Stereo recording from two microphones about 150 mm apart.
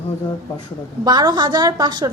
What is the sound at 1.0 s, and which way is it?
A woman's voice, 30° right (ahead or behind).